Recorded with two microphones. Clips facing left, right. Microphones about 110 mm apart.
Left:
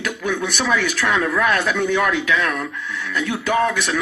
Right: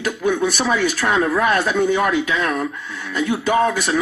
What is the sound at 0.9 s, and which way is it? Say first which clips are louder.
A man's voice: right 2 dB; 35° right (ahead or behind).